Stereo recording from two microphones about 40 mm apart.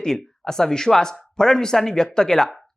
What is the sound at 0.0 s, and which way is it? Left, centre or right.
Speech, centre.